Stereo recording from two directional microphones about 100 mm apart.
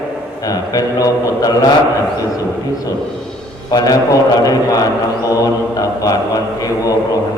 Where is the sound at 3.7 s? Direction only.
40° left (ahead or behind).